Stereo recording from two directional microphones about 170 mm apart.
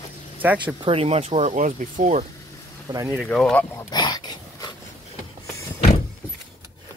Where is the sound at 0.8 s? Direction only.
35° right (ahead or behind).